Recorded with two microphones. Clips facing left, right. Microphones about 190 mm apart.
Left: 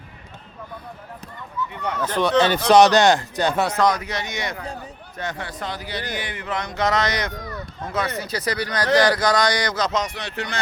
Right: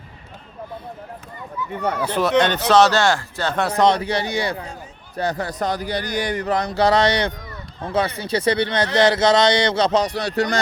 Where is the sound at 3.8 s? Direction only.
30° right (ahead or behind).